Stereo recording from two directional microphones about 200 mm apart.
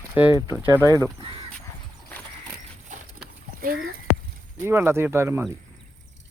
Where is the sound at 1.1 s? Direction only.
30° right (ahead or behind).